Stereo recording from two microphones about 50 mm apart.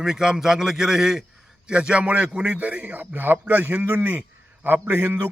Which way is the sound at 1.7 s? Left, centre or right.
Centre.